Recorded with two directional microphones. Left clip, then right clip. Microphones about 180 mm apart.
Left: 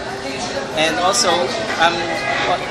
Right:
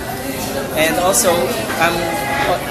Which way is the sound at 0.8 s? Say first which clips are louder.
Right 1 dB; 15° right (ahead or behind).